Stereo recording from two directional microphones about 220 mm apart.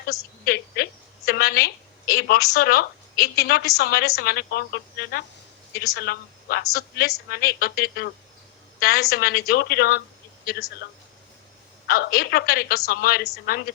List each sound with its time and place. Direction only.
0.4 s a woman's voice: 45° left (ahead or behind)
11.9 s a woman's voice: 45° left (ahead or behind)